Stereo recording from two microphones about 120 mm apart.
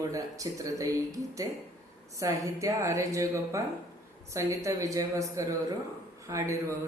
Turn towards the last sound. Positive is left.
turn(degrees=-25)  # may be behind; listen again after turning